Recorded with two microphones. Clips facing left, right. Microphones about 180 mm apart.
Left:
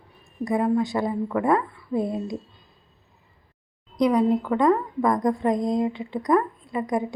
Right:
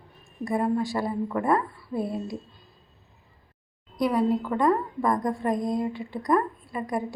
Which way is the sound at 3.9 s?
20° left (ahead or behind).